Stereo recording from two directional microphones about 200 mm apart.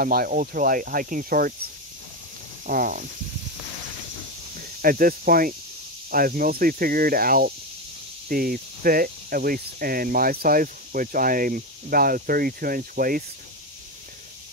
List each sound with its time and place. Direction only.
0.0 s speech: 45° right (ahead or behind)
4.6 s speech: 45° right (ahead or behind)